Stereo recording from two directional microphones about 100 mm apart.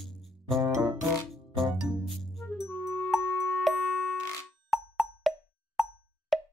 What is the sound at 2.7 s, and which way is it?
Music, 20° left (ahead or behind).